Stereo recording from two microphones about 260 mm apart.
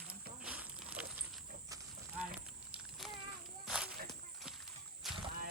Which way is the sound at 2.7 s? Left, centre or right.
Centre.